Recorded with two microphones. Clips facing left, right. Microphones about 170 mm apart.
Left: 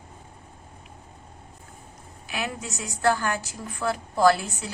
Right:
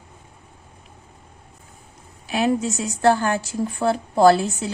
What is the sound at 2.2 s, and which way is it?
A woman's voice, 30° right (ahead or behind).